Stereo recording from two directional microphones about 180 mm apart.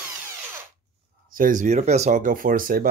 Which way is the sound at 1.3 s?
50° right (ahead or behind).